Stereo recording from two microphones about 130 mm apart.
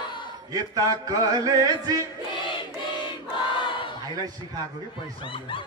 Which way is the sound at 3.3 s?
40° left (ahead or behind).